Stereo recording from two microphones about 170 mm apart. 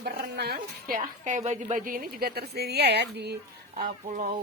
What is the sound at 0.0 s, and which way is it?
A woman's voice, 70° right (ahead or behind).